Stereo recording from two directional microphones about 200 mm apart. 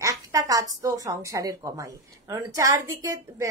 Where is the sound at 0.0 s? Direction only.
15° right (ahead or behind).